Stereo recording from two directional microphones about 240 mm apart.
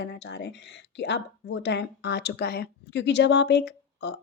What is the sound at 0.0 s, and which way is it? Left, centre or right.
Speech, left.